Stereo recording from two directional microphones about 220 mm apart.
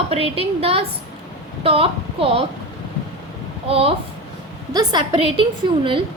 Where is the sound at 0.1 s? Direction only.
25° right (ahead or behind).